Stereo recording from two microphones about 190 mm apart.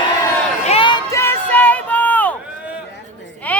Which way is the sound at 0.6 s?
30° left (ahead or behind).